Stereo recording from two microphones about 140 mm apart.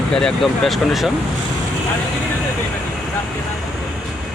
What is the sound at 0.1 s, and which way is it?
Speech, 5° left (ahead or behind).